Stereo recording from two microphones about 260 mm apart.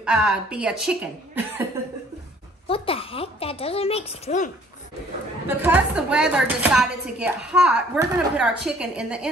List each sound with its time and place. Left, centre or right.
0.0 s speech: centre
2.7 s a woman's voice: left
5.5 s speech: centre